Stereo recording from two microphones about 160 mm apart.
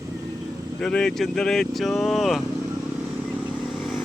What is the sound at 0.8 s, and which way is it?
Speech, 5° left (ahead or behind).